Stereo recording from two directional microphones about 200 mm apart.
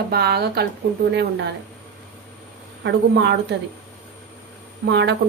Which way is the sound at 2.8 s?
60° right (ahead or behind).